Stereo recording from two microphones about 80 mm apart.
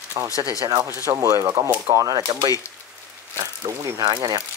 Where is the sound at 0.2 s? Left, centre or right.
Right.